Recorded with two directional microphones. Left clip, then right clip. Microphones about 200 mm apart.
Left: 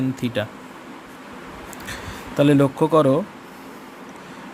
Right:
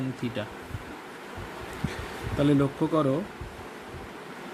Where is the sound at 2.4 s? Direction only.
50° left (ahead or behind).